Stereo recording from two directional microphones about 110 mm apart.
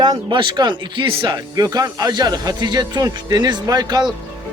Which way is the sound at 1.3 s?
35° right (ahead or behind).